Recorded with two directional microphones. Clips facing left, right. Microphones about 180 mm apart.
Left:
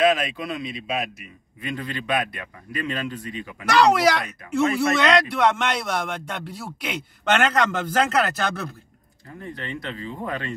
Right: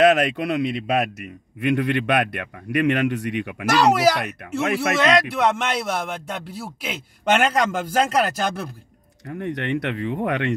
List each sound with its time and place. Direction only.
0.0 s a man's voice: 65° right (ahead or behind)
3.6 s speech: 5° right (ahead or behind)
4.4 s speech: 65° right (ahead or behind)
4.7 s a man's voice: 5° right (ahead or behind)
9.4 s a man's voice: 70° right (ahead or behind)